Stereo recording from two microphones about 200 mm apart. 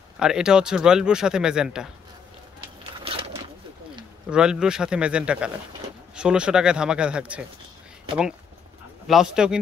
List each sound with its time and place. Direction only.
0.2 s speech: 5° right (ahead or behind)
3.0 s pigeon: 25° right (ahead or behind)
4.3 s speech: 5° right (ahead or behind)
9.0 s speech: centre (ahead or behind)